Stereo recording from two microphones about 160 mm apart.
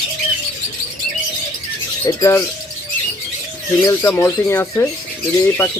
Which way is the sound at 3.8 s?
15° left (ahead or behind).